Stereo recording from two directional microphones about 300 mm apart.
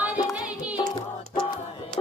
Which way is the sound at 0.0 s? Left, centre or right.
Centre.